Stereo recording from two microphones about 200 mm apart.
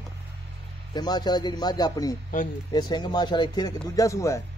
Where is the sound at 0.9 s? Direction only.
20° left (ahead or behind).